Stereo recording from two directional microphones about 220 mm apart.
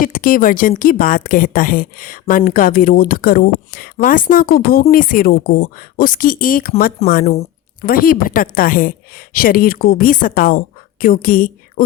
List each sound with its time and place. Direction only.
0.0 s a woman's voice: 40° left (ahead or behind)